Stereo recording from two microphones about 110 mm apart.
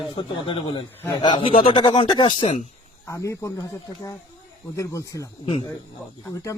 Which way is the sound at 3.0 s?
30° left (ahead or behind).